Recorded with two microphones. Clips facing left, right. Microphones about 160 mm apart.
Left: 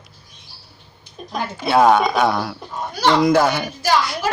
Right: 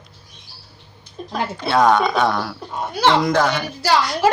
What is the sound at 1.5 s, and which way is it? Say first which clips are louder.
Speech: left 2 dB; 10° left (ahead or behind).